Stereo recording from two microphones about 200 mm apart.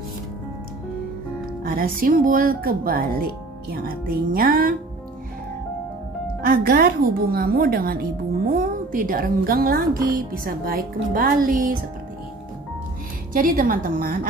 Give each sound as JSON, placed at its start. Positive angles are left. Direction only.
{"t": 1.6, "sound": "a woman's voice", "side_deg": -45}
{"t": 6.4, "sound": "a woman's voice", "side_deg": -50}
{"t": 13.3, "sound": "a woman's voice", "side_deg": -45}